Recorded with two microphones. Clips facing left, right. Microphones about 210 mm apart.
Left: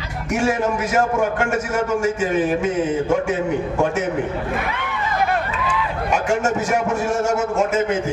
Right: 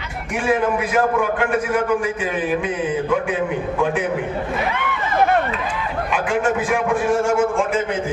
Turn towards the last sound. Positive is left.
turn(degrees=40)  # may be behind; listen again after turning